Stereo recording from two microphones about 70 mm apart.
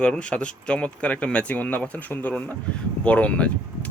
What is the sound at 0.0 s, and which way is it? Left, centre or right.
Speech, centre.